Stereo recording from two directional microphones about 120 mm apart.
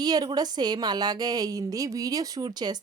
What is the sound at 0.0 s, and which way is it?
Speech, 35° right (ahead or behind).